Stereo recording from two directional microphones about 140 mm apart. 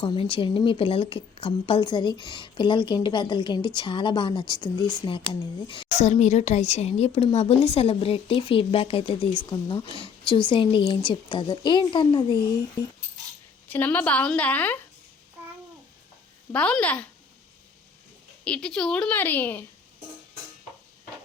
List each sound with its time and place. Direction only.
0.0 s a woman's voice: 35° left (ahead or behind)
5.9 s a woman's voice: 55° left (ahead or behind); by 12.4 s 35° left (ahead or behind)
13.7 s a woman's voice: 10° left (ahead or behind)
16.5 s a woman's voice: 10° left (ahead or behind)
18.4 s a woman's voice: 5° left (ahead or behind)